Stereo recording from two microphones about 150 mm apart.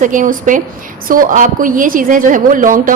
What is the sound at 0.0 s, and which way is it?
A woman's voice, 60° right (ahead or behind).